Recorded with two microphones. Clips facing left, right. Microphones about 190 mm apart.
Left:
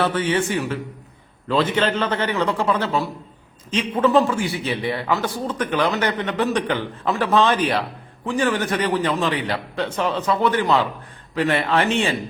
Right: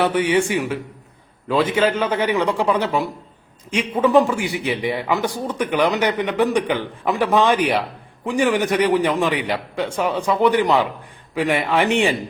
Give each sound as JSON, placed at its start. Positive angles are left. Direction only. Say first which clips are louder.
{"t": 0.0, "sound": "a man's voice", "louder": "right 3 dB", "side_deg": -15}